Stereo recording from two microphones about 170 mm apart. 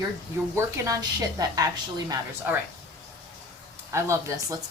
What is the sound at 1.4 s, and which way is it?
Speech, 20° right (ahead or behind).